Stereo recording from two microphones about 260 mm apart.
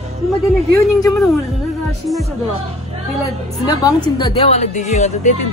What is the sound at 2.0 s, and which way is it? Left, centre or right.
Speech, centre.